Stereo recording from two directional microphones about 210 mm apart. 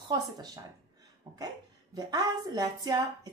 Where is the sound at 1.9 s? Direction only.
20° right (ahead or behind).